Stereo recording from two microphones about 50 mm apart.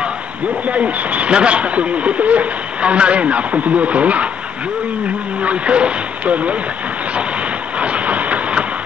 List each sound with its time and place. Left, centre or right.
0.7 s speech: right
5.4 s speech: right
7.8 s train: right